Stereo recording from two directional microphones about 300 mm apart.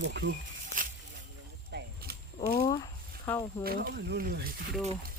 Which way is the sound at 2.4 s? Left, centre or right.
Centre.